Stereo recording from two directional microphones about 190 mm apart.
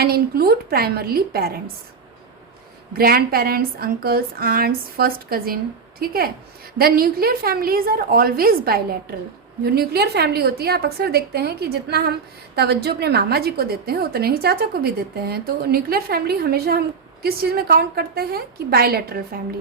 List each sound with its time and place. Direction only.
0.0 s speech: 55° right (ahead or behind)
3.0 s a woman's voice: 50° right (ahead or behind)